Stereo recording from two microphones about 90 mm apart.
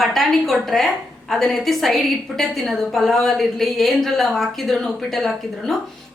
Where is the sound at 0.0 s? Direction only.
Centre (ahead or behind).